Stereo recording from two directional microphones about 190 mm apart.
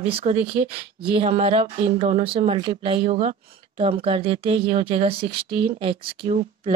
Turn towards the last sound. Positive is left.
turn(degrees=-35)  # may be behind; listen again after turning